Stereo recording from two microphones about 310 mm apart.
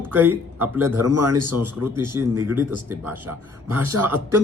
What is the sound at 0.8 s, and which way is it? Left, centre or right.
Speech, right.